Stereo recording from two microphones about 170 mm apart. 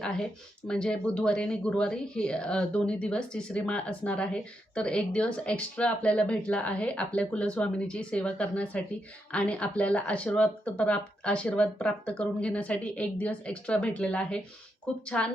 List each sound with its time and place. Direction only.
0.0 s a woman's voice: 5° left (ahead or behind)